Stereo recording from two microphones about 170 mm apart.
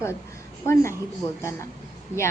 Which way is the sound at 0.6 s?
15° left (ahead or behind).